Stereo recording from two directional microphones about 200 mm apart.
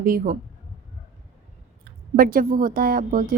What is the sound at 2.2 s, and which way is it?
A woman's voice, 45° right (ahead or behind).